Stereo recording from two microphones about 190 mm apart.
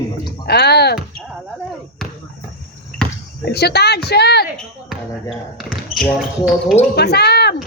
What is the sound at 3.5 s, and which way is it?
Speech, 60° left (ahead or behind).